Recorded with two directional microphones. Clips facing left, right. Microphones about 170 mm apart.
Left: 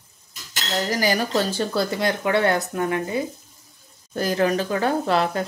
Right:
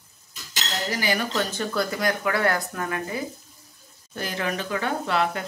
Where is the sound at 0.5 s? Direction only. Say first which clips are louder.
Left 4 dB; 40° left (ahead or behind); by 3.2 s 25° left (ahead or behind).